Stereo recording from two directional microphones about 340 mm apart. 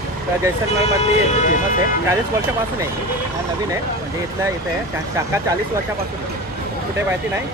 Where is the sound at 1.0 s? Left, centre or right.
Left.